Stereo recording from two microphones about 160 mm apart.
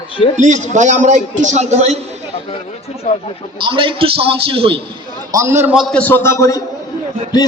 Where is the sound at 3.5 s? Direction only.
35° right (ahead or behind).